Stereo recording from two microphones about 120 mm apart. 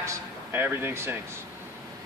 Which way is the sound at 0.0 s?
20° right (ahead or behind).